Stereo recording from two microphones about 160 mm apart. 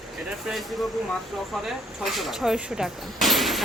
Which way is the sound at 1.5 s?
Centre (ahead or behind).